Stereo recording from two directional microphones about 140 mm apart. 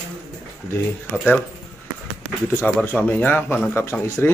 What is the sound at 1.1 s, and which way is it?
Speech, 10° left (ahead or behind).